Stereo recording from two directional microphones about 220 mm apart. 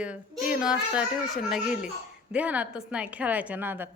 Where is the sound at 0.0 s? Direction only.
5° right (ahead or behind).